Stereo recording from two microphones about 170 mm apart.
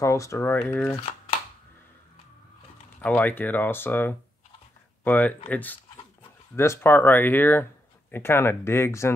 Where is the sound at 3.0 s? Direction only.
10° left (ahead or behind).